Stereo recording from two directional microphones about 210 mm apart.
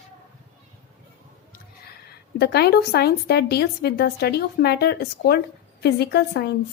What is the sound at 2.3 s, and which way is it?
A woman's voice, 50° left (ahead or behind).